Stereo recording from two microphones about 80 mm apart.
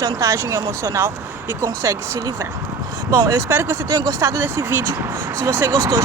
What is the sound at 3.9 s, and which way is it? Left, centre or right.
Speech, right.